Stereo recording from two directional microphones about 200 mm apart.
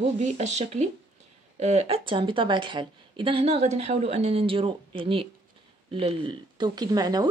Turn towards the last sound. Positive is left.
turn(degrees=-20)  # may be behind; listen again after turning